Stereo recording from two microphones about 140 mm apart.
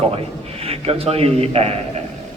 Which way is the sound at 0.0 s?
45° right (ahead or behind).